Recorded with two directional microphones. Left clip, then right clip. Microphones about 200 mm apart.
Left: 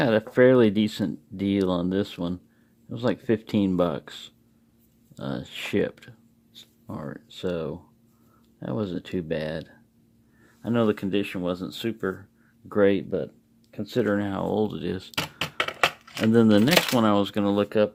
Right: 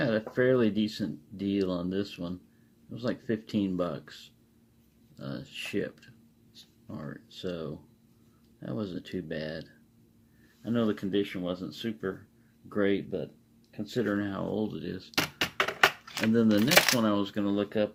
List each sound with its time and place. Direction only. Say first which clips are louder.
0.0 s speech: left 8 dB; 50° left (ahead or behind)
16.3 s speech: left 4 dB; 50° left (ahead or behind)